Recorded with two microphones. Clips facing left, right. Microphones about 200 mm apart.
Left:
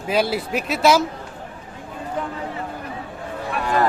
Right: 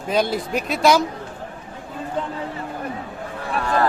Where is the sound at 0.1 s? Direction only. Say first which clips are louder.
Even; 5° left (ahead or behind).